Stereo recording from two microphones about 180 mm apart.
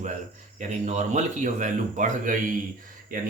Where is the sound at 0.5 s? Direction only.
40° right (ahead or behind).